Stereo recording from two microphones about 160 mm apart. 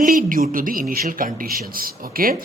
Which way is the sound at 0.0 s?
60° right (ahead or behind).